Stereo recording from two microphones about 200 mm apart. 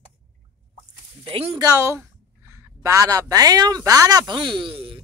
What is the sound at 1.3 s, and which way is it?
A woman's voice, 25° right (ahead or behind).